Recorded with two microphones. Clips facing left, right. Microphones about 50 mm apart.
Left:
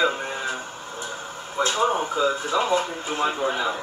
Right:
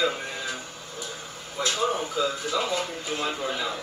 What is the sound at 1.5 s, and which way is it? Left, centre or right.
Speech, left.